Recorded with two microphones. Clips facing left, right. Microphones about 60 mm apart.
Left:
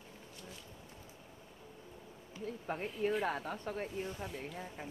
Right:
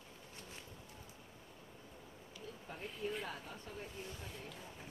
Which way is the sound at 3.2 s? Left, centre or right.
Left.